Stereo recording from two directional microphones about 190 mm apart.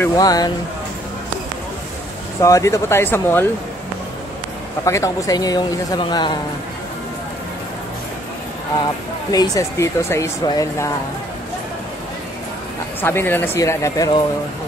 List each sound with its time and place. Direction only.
0.0 s a man's voice: 20° left (ahead or behind)
2.4 s speech: 15° left (ahead or behind)
4.8 s a man's voice: 15° left (ahead or behind)
9.3 s speech: 15° left (ahead or behind)
13.0 s speech: 10° left (ahead or behind)